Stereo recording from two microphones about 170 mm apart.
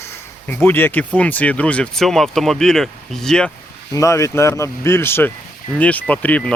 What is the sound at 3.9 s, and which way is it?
Speech, 20° left (ahead or behind).